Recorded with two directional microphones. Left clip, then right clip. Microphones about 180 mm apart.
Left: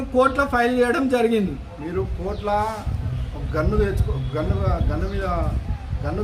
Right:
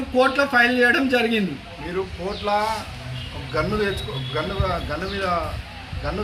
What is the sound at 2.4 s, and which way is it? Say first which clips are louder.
Speech: right 1 dB; 35° left (ahead or behind).